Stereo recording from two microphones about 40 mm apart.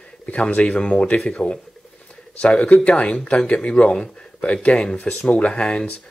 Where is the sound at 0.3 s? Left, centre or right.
Left.